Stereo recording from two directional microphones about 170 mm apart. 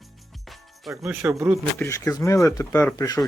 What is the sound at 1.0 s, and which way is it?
Speech, 15° right (ahead or behind).